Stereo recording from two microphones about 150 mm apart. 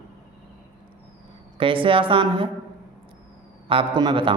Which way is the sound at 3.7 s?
35° right (ahead or behind).